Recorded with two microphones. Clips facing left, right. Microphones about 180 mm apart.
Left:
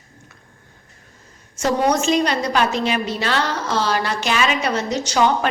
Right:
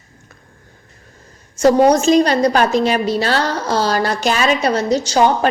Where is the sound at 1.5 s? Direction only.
35° right (ahead or behind).